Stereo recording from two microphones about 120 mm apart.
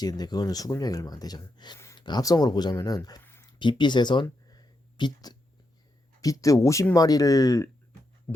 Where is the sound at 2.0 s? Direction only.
35° left (ahead or behind).